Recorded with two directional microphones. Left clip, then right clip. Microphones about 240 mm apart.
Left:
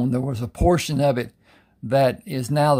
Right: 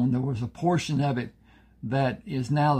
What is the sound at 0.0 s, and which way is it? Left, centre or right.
Speech, left.